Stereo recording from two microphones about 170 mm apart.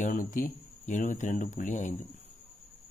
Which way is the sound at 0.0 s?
50° left (ahead or behind).